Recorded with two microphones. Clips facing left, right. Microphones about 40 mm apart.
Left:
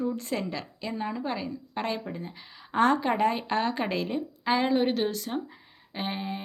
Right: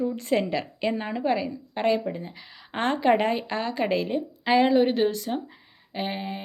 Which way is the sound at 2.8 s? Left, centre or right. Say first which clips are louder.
Right 1 dB; centre.